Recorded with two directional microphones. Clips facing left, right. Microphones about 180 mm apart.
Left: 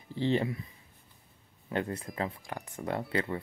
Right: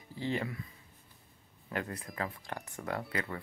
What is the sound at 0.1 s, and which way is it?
Speech, 30° left (ahead or behind).